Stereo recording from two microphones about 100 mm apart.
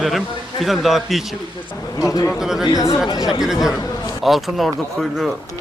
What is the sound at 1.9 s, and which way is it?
Speech, 35° left (ahead or behind).